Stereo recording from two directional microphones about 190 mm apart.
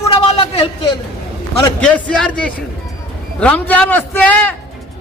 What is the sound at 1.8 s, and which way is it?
A man's voice, 5° left (ahead or behind).